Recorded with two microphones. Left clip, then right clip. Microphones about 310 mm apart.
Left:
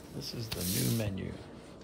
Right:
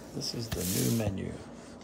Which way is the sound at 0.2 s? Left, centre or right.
Centre.